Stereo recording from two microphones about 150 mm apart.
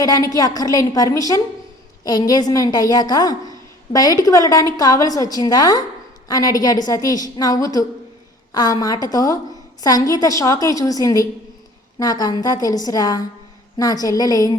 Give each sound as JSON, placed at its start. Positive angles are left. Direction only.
{"t": 0.0, "sound": "a woman's voice", "side_deg": 25}